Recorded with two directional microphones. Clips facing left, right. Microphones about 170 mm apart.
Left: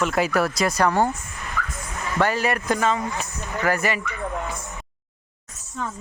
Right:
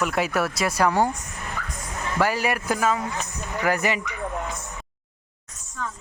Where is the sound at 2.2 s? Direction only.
10° right (ahead or behind).